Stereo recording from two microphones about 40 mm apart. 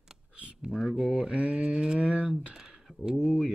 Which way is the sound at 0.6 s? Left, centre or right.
Centre.